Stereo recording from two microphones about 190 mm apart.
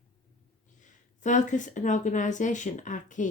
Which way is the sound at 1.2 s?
40° left (ahead or behind).